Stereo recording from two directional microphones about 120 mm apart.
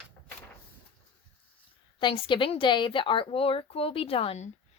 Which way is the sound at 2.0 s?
45° left (ahead or behind).